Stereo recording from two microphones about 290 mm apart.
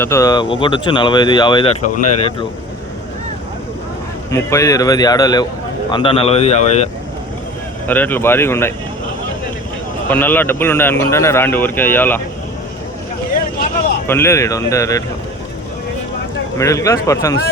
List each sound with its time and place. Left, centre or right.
0.0 s speech: centre; by 2.3 s left
4.3 s speech: centre
7.9 s speech: centre
10.1 s speech: centre
14.1 s speech: centre
16.6 s speech: centre